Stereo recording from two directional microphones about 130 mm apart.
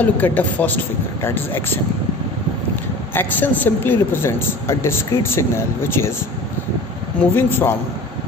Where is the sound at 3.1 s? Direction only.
15° left (ahead or behind).